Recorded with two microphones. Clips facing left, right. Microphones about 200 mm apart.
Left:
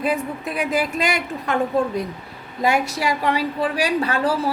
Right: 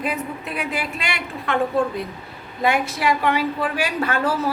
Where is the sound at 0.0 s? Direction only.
40° left (ahead or behind).